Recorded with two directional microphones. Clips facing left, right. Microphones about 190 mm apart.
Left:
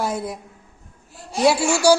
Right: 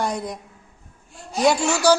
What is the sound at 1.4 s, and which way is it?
Speech, 10° left (ahead or behind).